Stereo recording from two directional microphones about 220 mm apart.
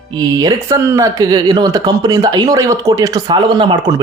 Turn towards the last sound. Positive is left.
turn(degrees=-20)  # may be behind; listen again after turning